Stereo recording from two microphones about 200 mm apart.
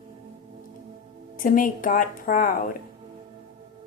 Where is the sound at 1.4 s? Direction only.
45° left (ahead or behind).